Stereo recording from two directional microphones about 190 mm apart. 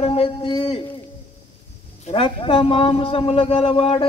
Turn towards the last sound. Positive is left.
turn(degrees=30)  # may be behind; listen again after turning